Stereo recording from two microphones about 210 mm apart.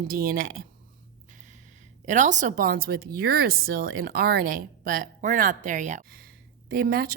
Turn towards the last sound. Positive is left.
turn(degrees=-45)  # may be behind; listen again after turning